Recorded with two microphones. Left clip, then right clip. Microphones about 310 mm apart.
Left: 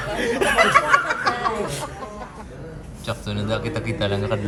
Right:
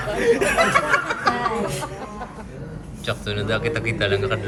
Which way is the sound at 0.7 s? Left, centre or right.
Centre.